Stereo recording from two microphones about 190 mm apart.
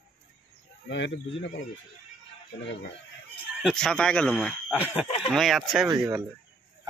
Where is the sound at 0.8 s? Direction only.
70° left (ahead or behind).